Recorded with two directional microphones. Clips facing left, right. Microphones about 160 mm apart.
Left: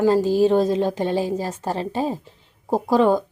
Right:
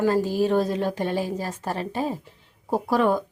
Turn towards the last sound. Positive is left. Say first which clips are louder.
# left 4 dB
turn(degrees=25)  # may be behind; listen again after turning